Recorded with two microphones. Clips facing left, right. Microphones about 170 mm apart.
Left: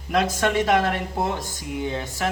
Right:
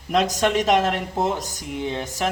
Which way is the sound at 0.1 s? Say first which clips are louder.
Right 2 dB; 20° right (ahead or behind).